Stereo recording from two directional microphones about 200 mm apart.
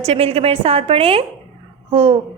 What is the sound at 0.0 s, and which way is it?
A woman's voice, 30° right (ahead or behind).